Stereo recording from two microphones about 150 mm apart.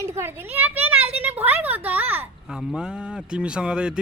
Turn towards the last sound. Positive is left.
turn(degrees=-5)  # may be behind; listen again after turning